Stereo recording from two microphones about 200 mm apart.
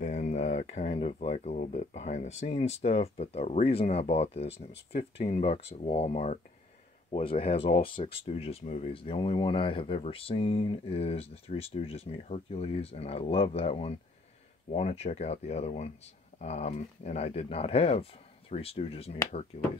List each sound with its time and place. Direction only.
0.0 s speech: 35° left (ahead or behind)